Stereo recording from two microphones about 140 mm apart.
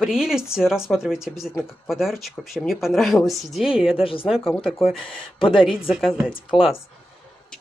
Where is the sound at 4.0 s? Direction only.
40° left (ahead or behind).